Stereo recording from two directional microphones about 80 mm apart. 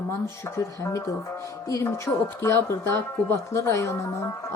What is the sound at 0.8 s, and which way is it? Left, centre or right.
Speech, left.